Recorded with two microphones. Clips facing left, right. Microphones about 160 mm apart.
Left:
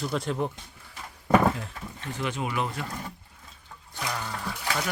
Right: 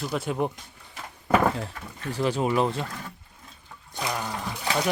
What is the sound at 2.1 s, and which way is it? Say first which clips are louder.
Speech: right 7 dB; 35° right (ahead or behind).